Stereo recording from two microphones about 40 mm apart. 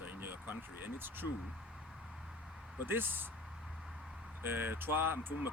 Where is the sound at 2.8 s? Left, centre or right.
Right.